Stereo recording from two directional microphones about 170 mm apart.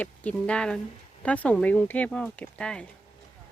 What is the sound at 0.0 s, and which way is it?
Speech, 10° left (ahead or behind).